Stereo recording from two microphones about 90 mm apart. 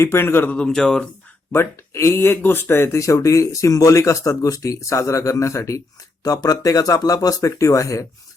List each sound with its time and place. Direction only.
0.0 s speech: 30° left (ahead or behind)
0.5 s speech: 10° left (ahead or behind)
1.5 s speech: 30° left (ahead or behind)
6.2 s speech: 45° left (ahead or behind)